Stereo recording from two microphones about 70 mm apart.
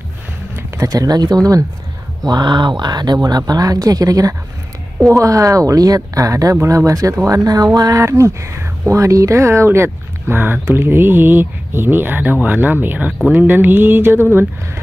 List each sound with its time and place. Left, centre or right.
0.8 s speech: right
2.2 s speech: right
6.5 s speech: right